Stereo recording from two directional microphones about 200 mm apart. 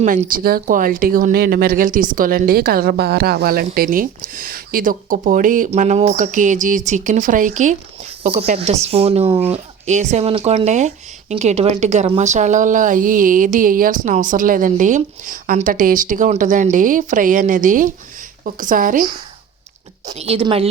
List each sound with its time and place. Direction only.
0.0 s speech: 40° right (ahead or behind)
20.1 s a woman's voice: 30° right (ahead or behind)